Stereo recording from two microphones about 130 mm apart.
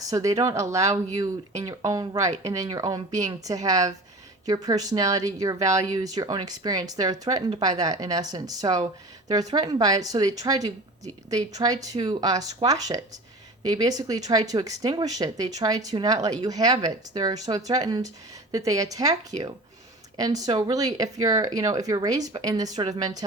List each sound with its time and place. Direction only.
0.0 s speech: 25° right (ahead or behind)